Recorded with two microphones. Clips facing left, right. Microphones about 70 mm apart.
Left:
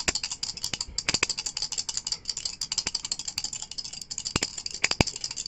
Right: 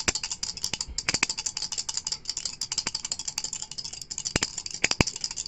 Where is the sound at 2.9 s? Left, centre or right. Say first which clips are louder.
Even; centre.